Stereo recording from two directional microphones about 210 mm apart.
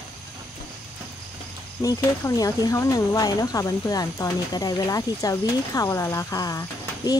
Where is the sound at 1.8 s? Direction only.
15° left (ahead or behind).